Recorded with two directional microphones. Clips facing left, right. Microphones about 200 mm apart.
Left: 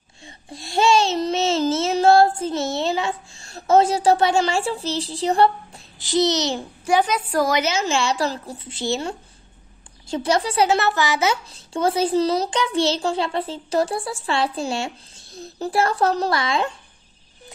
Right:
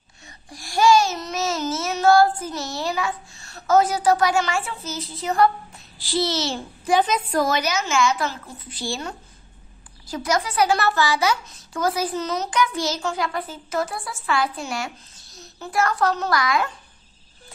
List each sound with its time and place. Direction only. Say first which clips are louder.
0.2 s child singing: left 4 dB; 25° left (ahead or behind)
6.0 s a child's voice: left 4 dB; 20° left (ahead or behind)
7.6 s a child's voice: even; 30° left (ahead or behind)
15.2 s a sound: left 10 dB; 55° left (ahead or behind)
15.6 s a child's voice: left 2 dB; 30° left (ahead or behind)